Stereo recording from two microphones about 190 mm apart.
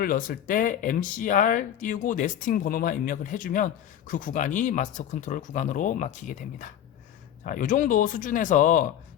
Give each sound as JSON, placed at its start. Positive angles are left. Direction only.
{"t": 0.0, "sound": "speech", "side_deg": 50}